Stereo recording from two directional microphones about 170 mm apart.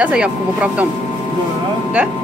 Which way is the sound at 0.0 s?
5° right (ahead or behind).